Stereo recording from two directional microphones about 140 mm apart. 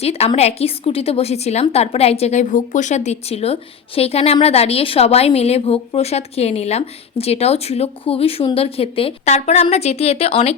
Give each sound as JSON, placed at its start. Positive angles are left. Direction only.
{"t": 0.0, "sound": "speech", "side_deg": 45}